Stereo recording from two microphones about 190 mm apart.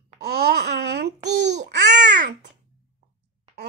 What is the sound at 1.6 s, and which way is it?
Babbling, 65° right (ahead or behind).